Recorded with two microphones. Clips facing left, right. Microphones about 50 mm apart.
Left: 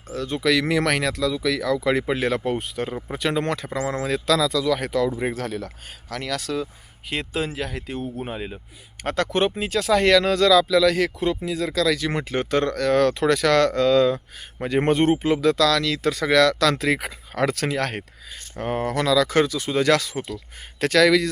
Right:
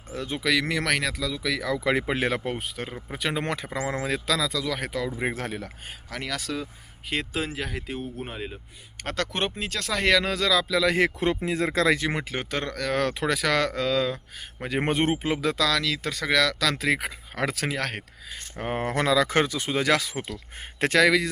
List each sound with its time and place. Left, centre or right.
0.1 s speech: centre
0.4 s speech: centre
2.6 s speech: centre; by 4.1 s right
4.1 s speech: centre
5.3 s speech: right
5.6 s speech: centre
10.9 s speech: right
12.3 s speech: centre
18.5 s speech: centre
18.8 s speech: right
19.7 s speech: centre